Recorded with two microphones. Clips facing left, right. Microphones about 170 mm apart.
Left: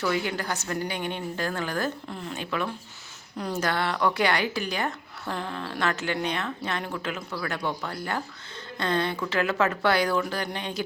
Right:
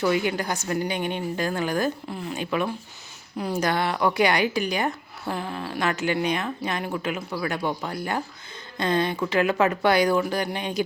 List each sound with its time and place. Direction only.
0.0 s a woman's voice: 15° right (ahead or behind)